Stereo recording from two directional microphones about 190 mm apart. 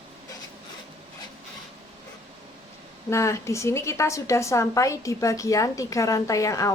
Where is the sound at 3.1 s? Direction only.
15° left (ahead or behind).